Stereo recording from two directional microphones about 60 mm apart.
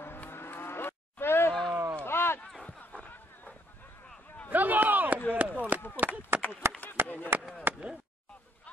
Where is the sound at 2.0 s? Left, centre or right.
Left.